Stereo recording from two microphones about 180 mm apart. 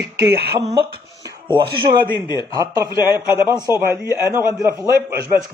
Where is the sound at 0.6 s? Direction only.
30° right (ahead or behind).